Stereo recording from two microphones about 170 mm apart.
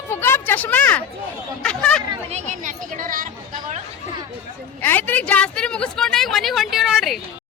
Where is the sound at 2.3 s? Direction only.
45° right (ahead or behind).